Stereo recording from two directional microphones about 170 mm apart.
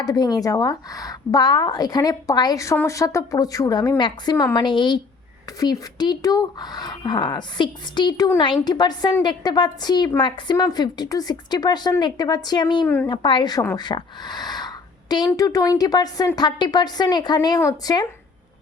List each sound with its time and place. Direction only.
0.0 s a woman's voice: 25° left (ahead or behind)